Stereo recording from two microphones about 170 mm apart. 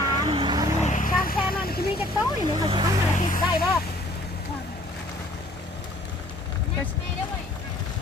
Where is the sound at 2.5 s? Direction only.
30° right (ahead or behind).